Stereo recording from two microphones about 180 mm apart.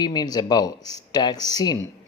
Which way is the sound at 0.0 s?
25° left (ahead or behind).